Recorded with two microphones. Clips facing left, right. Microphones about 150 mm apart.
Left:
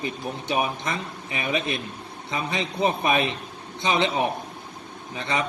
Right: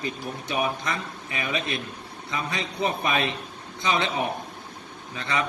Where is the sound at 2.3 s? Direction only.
20° left (ahead or behind).